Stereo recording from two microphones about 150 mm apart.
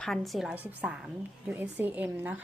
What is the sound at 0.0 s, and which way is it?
A woman's voice, centre (ahead or behind).